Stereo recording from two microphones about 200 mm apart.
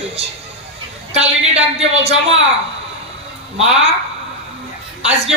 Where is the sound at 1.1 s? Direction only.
30° right (ahead or behind).